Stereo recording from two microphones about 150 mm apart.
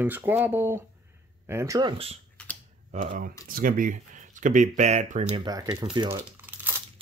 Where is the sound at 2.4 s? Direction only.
5° left (ahead or behind).